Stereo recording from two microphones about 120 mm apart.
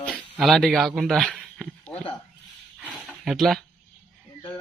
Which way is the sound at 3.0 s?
Centre (ahead or behind).